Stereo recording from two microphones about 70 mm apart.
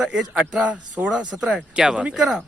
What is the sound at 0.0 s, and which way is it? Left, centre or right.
Speech, centre.